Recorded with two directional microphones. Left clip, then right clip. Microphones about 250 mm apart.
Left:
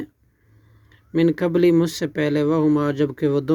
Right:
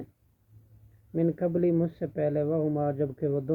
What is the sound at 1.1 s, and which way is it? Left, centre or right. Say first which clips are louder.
Speech: left 9 dB; left.